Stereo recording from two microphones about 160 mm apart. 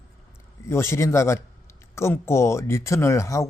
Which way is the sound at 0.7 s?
15° left (ahead or behind).